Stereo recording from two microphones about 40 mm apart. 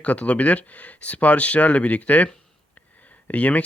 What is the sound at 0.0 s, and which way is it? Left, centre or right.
Speech, left.